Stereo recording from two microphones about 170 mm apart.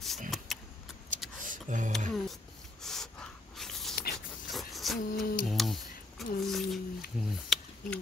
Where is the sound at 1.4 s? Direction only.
50° right (ahead or behind).